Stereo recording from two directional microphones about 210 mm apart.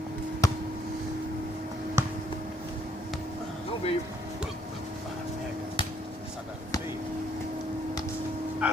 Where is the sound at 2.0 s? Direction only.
15° right (ahead or behind).